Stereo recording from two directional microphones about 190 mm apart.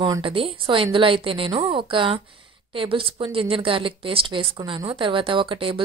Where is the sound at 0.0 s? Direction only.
25° right (ahead or behind).